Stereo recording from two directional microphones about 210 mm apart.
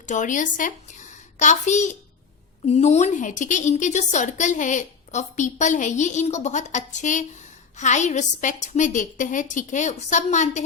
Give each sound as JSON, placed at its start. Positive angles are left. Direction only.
{"t": 0.0, "sound": "a child's voice", "side_deg": 35}